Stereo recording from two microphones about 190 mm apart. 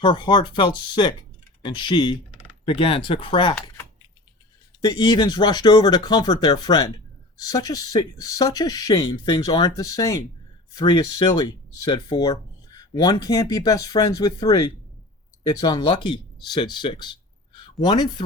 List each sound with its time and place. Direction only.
0.0 s speech: 25° left (ahead or behind)
4.8 s speech: 20° left (ahead or behind)